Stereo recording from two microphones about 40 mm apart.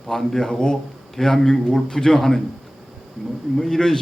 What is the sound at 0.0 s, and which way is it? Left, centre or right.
A man's voice, centre.